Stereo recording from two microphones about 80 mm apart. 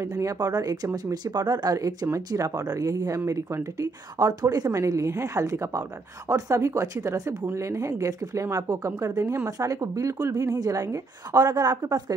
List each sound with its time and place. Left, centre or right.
0.0 s speech: right